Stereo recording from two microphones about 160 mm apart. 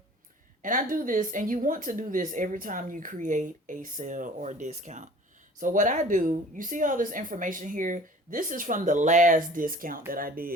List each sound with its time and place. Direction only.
0.6 s speech: 55° right (ahead or behind)